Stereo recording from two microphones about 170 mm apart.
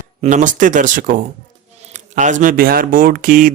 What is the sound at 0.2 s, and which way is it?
Speech, 45° right (ahead or behind).